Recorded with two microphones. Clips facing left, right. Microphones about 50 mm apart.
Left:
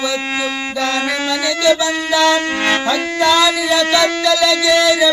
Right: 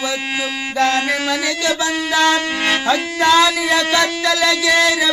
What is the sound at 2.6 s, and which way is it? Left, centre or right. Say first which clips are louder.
Music: left 2 dB; left.